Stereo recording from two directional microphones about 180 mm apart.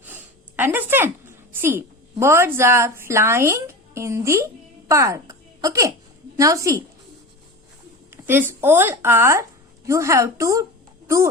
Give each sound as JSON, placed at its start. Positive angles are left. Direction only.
{"t": 0.0, "sound": "a woman's voice", "side_deg": -10}
{"t": 8.1, "sound": "speech", "side_deg": -10}